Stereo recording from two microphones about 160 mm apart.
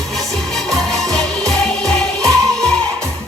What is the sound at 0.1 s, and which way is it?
Music, centre (ahead or behind).